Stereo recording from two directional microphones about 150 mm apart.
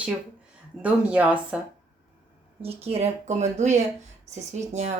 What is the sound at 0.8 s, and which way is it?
Speech, 10° right (ahead or behind).